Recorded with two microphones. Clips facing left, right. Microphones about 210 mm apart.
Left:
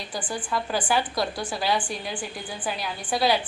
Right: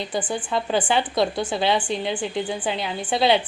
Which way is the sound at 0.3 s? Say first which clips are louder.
Right 4 dB; 25° right (ahead or behind).